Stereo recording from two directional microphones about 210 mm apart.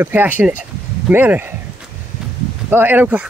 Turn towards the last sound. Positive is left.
turn(degrees=-5)  # may be behind; listen again after turning